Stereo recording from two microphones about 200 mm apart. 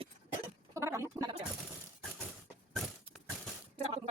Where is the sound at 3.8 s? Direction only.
30° right (ahead or behind).